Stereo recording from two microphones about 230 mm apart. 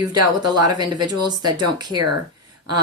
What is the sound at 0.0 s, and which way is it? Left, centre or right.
Speech, centre.